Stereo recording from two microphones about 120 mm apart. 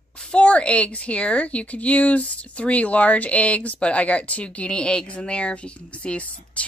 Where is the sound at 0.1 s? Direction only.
10° left (ahead or behind).